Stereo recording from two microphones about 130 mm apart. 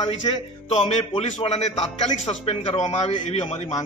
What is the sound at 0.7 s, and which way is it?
A man's voice, 55° left (ahead or behind).